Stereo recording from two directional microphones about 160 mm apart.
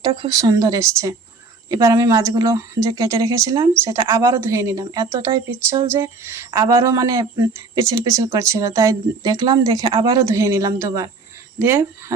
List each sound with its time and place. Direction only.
0.0 s speech: 35° right (ahead or behind)
0.3 s speech: 25° right (ahead or behind)
5.9 s speech: 15° right (ahead or behind)